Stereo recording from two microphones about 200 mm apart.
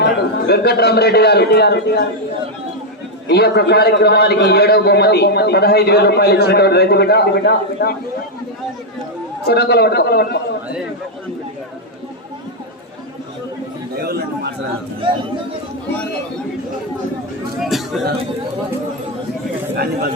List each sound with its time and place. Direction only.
0.0 s a man's voice: 55° left (ahead or behind)
3.2 s a man's voice: 55° left (ahead or behind)
9.5 s a man's voice: 55° left (ahead or behind)
14.0 s a man's voice: 50° right (ahead or behind)
17.6 s a man's voice: centre (ahead or behind)
19.7 s a man's voice: 50° right (ahead or behind)